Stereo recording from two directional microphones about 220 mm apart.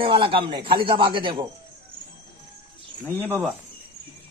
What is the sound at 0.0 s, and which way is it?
Speech, 25° right (ahead or behind).